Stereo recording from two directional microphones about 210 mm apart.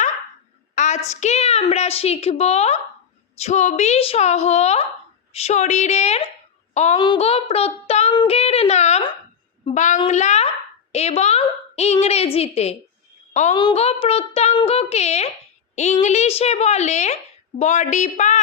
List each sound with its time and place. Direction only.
0.8 s a woman's voice: 35° left (ahead or behind)
7.0 s child singing: 25° left (ahead or behind)
9.6 s a woman's voice: 35° left (ahead or behind)